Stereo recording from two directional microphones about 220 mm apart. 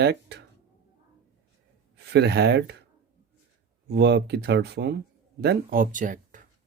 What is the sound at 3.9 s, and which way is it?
Speech, 50° right (ahead or behind).